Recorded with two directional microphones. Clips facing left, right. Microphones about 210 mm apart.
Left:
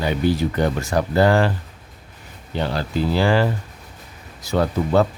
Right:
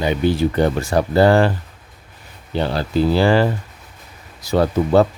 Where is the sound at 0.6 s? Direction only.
30° right (ahead or behind).